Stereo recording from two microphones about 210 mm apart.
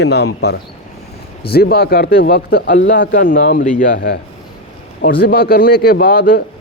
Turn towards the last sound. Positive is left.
turn(degrees=45)  # may be behind; listen again after turning